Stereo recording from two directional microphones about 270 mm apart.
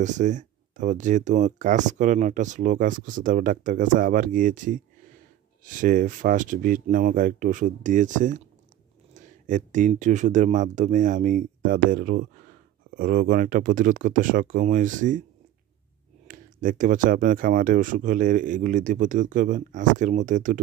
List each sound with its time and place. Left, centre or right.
0.0 s speech: right
16.3 s speech: right